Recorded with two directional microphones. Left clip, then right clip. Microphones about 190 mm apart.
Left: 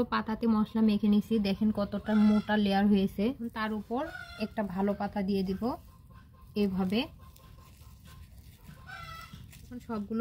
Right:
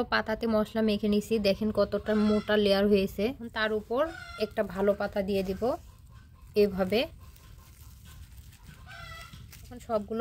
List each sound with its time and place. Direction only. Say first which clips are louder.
0.0 s a woman's voice: right 3 dB; 55° right (ahead or behind)